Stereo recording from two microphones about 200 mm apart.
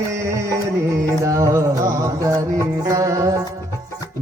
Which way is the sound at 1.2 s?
15° right (ahead or behind).